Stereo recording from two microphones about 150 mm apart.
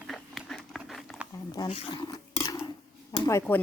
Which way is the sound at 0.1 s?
Centre (ahead or behind).